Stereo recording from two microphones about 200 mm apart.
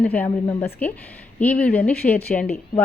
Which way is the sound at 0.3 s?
25° left (ahead or behind).